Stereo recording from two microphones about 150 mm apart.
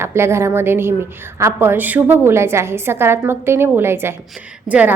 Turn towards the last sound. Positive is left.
turn(degrees=-10)  # may be behind; listen again after turning